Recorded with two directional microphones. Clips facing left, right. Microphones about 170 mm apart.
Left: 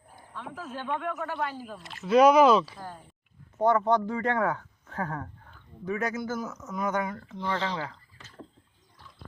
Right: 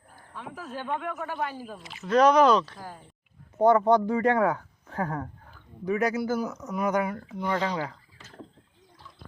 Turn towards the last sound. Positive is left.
turn(degrees=-15)  # may be behind; listen again after turning